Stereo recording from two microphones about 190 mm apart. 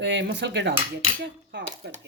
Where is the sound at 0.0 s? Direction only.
65° right (ahead or behind).